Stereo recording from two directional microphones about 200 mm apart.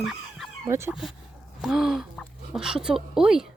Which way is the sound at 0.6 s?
15° right (ahead or behind).